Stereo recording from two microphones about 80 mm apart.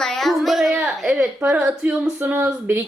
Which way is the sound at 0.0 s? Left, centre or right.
Centre.